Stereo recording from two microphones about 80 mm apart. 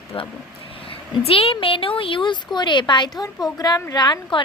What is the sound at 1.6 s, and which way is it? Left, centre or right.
A woman's voice, left.